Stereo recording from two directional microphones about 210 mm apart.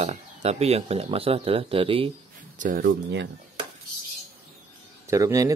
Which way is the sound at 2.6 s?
45° right (ahead or behind).